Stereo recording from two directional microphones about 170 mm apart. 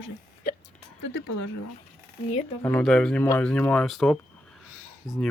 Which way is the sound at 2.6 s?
10° left (ahead or behind).